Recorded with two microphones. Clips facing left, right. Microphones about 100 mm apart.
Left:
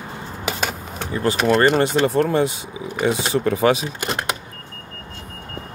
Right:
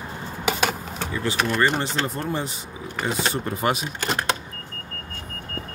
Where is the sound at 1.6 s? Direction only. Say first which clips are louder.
Left 5 dB; 60° left (ahead or behind).